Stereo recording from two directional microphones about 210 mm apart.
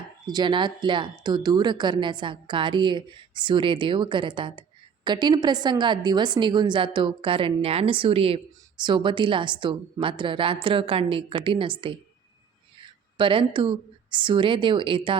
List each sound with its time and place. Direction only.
0.3 s a woman's voice: 20° right (ahead or behind)